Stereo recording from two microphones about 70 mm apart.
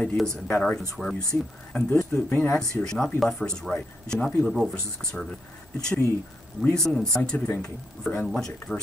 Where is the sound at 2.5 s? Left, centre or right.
Centre.